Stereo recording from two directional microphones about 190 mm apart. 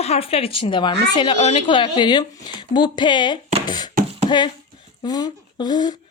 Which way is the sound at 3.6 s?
20° left (ahead or behind).